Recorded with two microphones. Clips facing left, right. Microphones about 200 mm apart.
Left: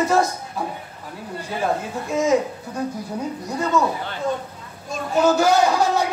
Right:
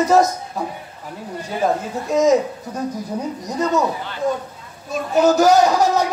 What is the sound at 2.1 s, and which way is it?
Speech, 40° right (ahead or behind).